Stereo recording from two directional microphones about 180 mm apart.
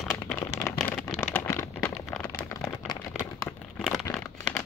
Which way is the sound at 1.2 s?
15° left (ahead or behind).